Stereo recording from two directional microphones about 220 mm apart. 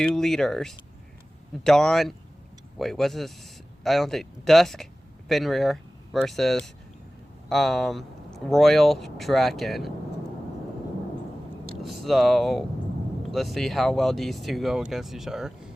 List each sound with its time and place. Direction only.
0.0 s speech: centre (ahead or behind)
11.8 s speech: centre (ahead or behind)